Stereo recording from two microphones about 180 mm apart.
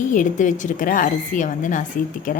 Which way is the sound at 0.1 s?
45° left (ahead or behind).